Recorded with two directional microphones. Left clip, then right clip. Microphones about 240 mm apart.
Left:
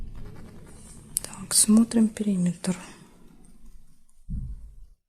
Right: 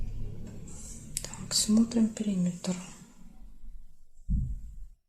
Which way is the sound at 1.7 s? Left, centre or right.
Left.